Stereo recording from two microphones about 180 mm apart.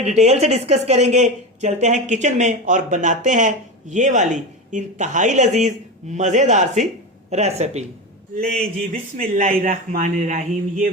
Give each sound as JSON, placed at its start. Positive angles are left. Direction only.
{"t": 0.0, "sound": "speech", "side_deg": -40}
{"t": 8.9, "sound": "speech", "side_deg": -45}